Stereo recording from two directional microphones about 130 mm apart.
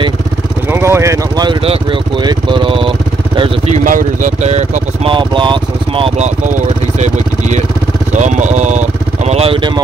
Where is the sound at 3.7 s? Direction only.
85° right; by 4.7 s 60° right (ahead or behind).